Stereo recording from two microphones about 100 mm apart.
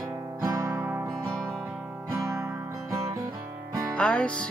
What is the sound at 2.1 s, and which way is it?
Music, 30° right (ahead or behind).